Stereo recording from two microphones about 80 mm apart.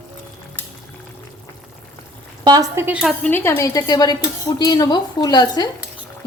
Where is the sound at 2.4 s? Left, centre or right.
Right.